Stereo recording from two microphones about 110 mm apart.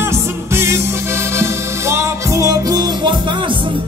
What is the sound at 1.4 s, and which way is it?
Music, 25° right (ahead or behind).